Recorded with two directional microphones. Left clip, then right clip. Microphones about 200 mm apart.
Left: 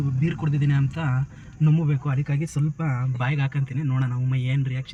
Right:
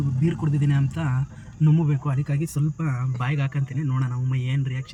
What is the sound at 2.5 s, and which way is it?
A man's voice, 15° left (ahead or behind).